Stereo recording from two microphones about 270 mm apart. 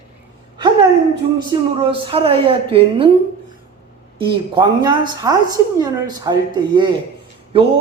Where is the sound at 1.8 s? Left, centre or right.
Centre.